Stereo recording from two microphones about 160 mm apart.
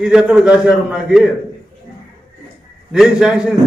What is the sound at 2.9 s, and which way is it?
Speech, 5° right (ahead or behind).